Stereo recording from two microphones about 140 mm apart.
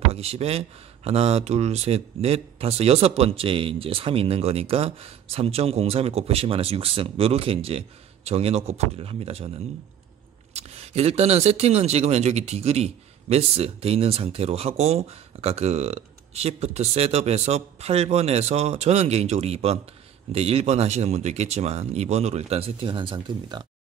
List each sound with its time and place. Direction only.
0.1 s speech: 45° right (ahead or behind)
10.5 s speech: 50° right (ahead or behind)